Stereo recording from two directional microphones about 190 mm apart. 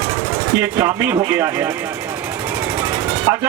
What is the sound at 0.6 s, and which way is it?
A man's voice, 15° right (ahead or behind).